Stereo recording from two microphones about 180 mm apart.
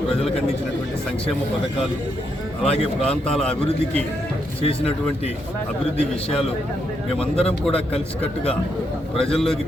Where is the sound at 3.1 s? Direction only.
5° left (ahead or behind).